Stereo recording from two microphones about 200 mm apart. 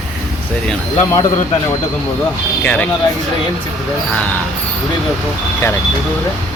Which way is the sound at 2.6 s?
10° left (ahead or behind).